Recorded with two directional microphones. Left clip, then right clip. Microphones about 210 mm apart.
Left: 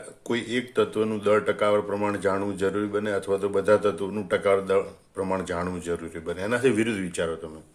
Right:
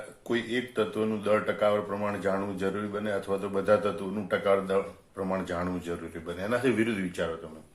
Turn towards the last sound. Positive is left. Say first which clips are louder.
# left 3 dB
turn(degrees=40)  # may be behind; listen again after turning